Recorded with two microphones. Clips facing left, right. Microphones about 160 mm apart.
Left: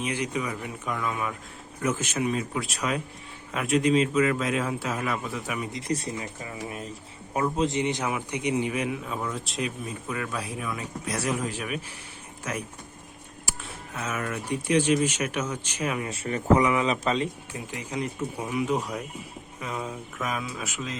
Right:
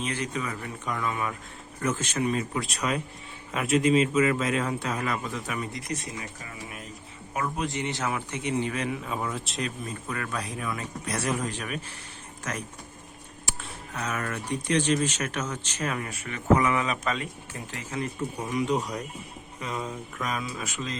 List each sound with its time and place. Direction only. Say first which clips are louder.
0.0 s a man's voice: left 2 dB; 10° left (ahead or behind)
5.9 s speech: left 5 dB; 30° left (ahead or behind); by 9.0 s 10° left (ahead or behind)
9.0 s a man's voice: even; centre (ahead or behind)
13.9 s speech: left 1 dB; 5° left (ahead or behind)
16.0 s speech: left 1 dB; 30° left (ahead or behind)
17.5 s a man's voice: left 2 dB; 15° left (ahead or behind)